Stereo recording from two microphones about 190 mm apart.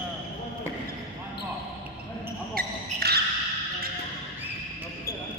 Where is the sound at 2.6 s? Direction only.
55° right (ahead or behind).